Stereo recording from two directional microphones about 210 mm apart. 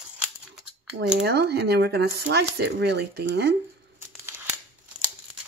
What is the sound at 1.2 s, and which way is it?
Speech, 50° right (ahead or behind).